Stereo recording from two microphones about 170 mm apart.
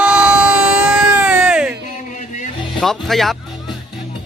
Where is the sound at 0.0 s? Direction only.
5° right (ahead or behind).